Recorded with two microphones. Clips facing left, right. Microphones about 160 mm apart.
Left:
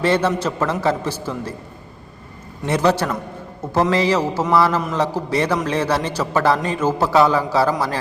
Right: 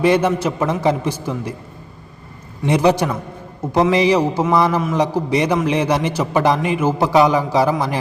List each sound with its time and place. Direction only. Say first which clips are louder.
0.0 s a man's voice: right 3 dB; 15° right (ahead or behind)
2.6 s a man's voice: right 3 dB; 15° right (ahead or behind)